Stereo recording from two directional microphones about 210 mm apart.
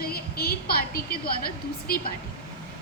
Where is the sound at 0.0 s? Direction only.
45° left (ahead or behind).